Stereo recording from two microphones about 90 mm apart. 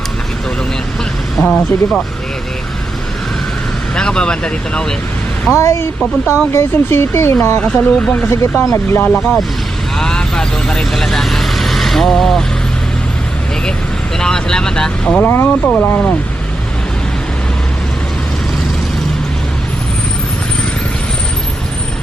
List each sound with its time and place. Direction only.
1.4 s speech: 10° left (ahead or behind)
3.9 s speech: 10° left (ahead or behind)
5.5 s speech: 30° left (ahead or behind)
7.6 s speech: 10° left (ahead or behind)
8.3 s speech: 30° left (ahead or behind)
9.1 s speech: 5° left (ahead or behind)
10.0 s vehicle: 10° left (ahead or behind)
14.2 s speech: 5° left (ahead or behind)
15.3 s speech: 20° left (ahead or behind)